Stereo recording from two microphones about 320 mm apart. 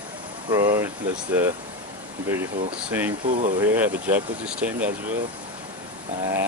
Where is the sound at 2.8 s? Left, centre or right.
Centre.